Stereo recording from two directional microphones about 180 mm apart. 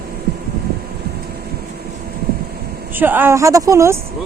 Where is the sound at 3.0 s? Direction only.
10° right (ahead or behind).